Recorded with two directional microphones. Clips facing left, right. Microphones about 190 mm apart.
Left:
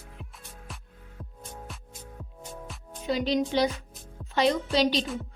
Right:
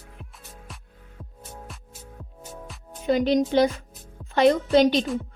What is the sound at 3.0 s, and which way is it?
A woman's voice, 50° right (ahead or behind).